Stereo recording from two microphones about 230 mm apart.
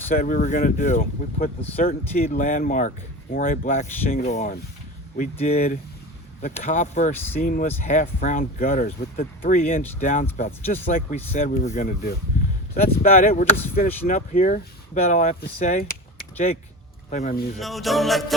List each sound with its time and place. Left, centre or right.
0.1 s speech: left
7.1 s speech: centre
7.3 s speech: left
17.1 s speech: left
17.6 s music: centre